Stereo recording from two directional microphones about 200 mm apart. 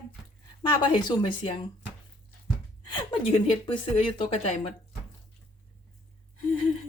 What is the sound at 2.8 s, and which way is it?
Speech, 25° left (ahead or behind).